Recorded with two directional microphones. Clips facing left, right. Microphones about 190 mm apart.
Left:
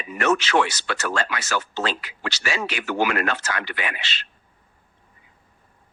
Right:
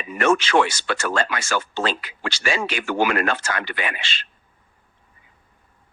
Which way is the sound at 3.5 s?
40° right (ahead or behind).